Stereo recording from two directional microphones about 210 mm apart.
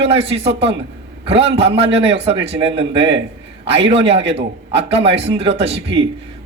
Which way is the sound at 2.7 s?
55° right (ahead or behind).